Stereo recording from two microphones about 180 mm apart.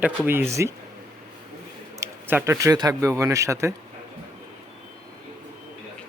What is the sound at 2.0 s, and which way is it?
Speech, 15° right (ahead or behind).